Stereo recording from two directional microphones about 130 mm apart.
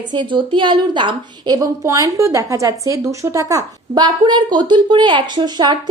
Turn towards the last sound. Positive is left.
turn(degrees=-35)  # may be behind; listen again after turning